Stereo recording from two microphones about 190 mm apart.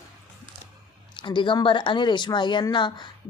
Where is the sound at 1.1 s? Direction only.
25° left (ahead or behind).